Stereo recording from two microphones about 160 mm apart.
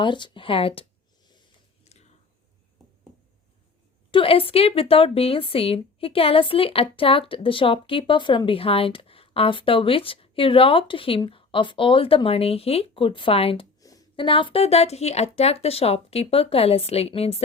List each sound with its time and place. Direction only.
0.0 s a woman's voice: 30° left (ahead or behind)
1.8 s biting: 45° left (ahead or behind)
4.1 s a woman's voice: 35° left (ahead or behind)